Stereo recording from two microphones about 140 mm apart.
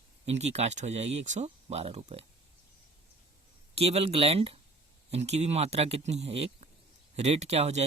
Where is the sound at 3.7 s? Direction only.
45° right (ahead or behind).